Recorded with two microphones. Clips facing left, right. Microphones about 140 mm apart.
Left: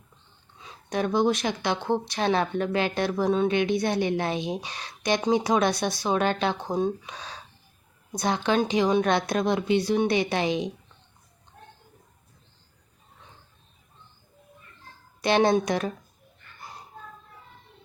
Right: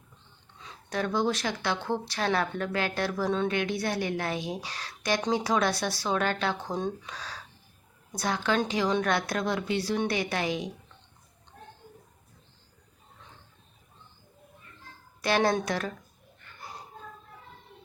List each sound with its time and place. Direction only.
0.9 s speech: 15° left (ahead or behind)
6.7 s speech: 10° left (ahead or behind)
7.1 s speech: 20° left (ahead or behind)
15.2 s speech: 20° left (ahead or behind)